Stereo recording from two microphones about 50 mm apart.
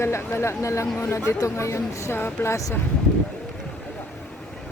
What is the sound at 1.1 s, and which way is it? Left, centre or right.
Speech, left.